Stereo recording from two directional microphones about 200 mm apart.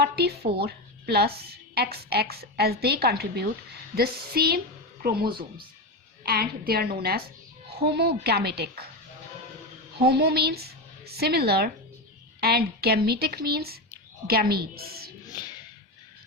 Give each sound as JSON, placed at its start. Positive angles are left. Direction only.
{"t": 0.0, "sound": "a woman's voice", "side_deg": -55}
{"t": 6.2, "sound": "a woman's voice", "side_deg": -50}
{"t": 10.0, "sound": "a woman's voice", "side_deg": -50}